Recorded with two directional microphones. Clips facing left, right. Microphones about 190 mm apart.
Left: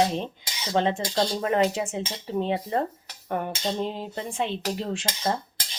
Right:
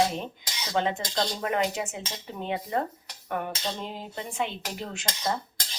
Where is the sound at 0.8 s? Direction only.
30° left (ahead or behind).